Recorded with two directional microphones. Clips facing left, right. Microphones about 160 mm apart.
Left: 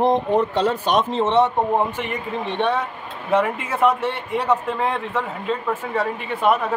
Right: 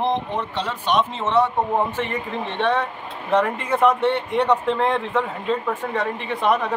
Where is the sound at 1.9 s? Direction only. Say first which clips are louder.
Right 1 dB; 15° left (ahead or behind).